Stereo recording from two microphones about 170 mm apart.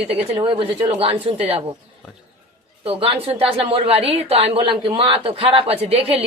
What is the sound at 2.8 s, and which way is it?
A woman's voice, 30° right (ahead or behind).